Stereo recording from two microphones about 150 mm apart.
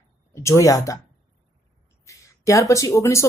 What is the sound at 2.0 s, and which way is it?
Speech, 20° left (ahead or behind).